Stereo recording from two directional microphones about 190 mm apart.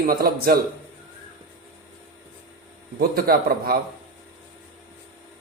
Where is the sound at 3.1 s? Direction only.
55° right (ahead or behind).